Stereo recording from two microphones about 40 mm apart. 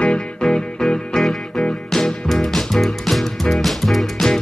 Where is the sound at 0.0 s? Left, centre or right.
Left.